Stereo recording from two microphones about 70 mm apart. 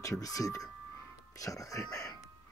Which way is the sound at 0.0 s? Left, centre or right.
Left.